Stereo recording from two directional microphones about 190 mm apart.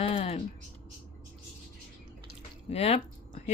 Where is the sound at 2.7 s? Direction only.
30° left (ahead or behind).